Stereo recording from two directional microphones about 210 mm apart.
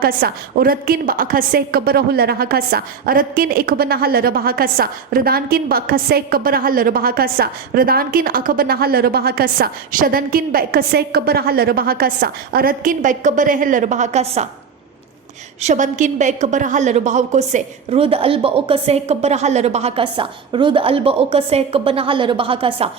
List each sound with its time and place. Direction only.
0.0 s a woman's voice: 45° right (ahead or behind)
15.6 s a woman's voice: 35° right (ahead or behind)